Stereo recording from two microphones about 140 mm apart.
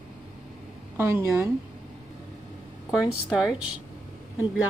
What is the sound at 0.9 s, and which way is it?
Speech, 20° right (ahead or behind).